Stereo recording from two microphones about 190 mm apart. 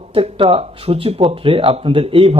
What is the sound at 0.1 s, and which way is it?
A man's voice, 30° right (ahead or behind).